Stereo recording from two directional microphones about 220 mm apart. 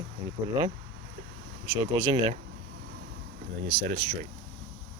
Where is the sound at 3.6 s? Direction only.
25° right (ahead or behind).